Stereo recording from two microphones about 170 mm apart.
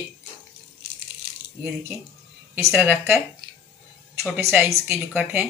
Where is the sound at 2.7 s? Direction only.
10° right (ahead or behind).